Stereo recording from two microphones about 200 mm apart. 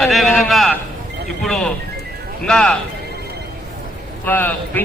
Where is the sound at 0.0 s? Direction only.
Centre (ahead or behind).